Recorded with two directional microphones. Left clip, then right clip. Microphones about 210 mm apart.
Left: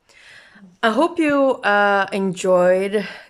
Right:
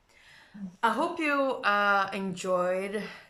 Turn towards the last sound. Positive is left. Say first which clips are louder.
# left 13 dB
turn(degrees=40)  # may be behind; listen again after turning